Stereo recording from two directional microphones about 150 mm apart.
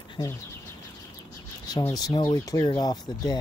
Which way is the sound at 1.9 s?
25° left (ahead or behind).